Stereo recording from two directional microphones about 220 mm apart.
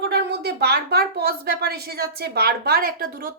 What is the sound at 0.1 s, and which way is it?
Speech, 50° right (ahead or behind).